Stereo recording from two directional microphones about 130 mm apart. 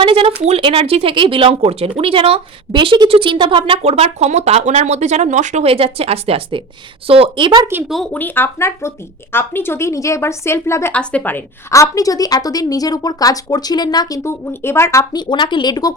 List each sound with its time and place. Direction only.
0.0 s speech: 45° right (ahead or behind); by 5.6 s 70° right (ahead or behind)
5.6 s a woman's voice: 50° right (ahead or behind)
7.9 s speech: centre (ahead or behind)
8.1 s a woman's voice: 15° left (ahead or behind)
10.9 s a woman's voice: 10° left (ahead or behind)
15.3 s speech: 35° left (ahead or behind)